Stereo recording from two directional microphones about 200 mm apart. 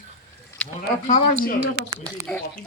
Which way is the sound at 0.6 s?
5° left (ahead or behind).